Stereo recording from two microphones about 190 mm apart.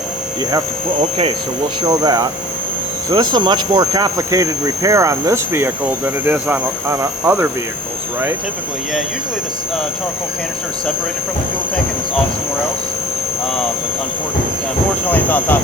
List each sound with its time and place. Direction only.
1.8 s speech: 20° right (ahead or behind)
15.1 s speech: 10° left (ahead or behind)